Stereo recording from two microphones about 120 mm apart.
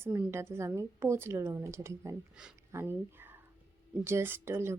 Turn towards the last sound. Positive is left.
turn(degrees=-20)  # may be behind; listen again after turning